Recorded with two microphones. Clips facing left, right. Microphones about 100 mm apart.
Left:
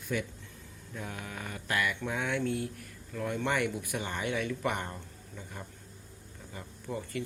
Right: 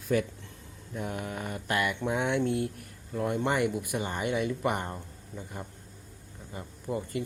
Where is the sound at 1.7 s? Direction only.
20° right (ahead or behind).